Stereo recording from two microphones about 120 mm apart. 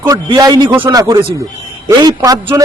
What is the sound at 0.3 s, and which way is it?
A man's voice, 35° right (ahead or behind).